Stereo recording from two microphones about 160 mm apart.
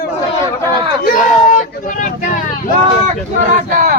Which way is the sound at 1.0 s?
55° left (ahead or behind).